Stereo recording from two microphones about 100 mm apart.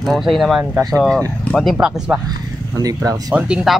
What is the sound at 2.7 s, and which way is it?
Speech, 35° right (ahead or behind).